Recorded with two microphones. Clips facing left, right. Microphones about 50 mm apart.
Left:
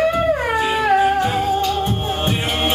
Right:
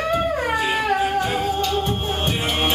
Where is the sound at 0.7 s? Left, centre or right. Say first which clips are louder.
Left 8 dB; centre.